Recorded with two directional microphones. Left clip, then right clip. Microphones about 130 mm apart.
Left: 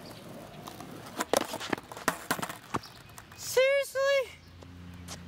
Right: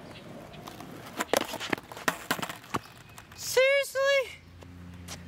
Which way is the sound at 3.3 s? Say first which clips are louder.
Right 2 dB; 10° right (ahead or behind).